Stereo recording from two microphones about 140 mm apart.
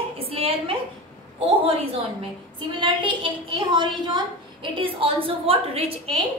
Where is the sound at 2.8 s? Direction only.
35° right (ahead or behind).